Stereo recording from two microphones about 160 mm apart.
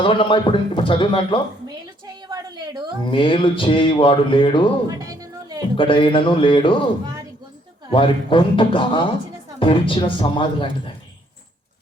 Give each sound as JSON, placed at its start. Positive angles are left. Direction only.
{"t": 0.0, "sound": "speech", "side_deg": 30}
{"t": 2.2, "sound": "a sound", "side_deg": -25}
{"t": 3.0, "sound": "speech", "side_deg": 30}
{"t": 4.9, "sound": "a sound", "side_deg": -20}
{"t": 5.7, "sound": "speech", "side_deg": 30}
{"t": 7.9, "sound": "speech", "side_deg": 30}